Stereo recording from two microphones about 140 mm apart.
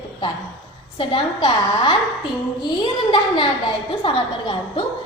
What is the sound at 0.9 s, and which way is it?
A woman's voice, 40° left (ahead or behind).